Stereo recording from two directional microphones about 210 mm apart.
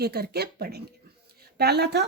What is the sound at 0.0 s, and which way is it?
Speech, 50° right (ahead or behind).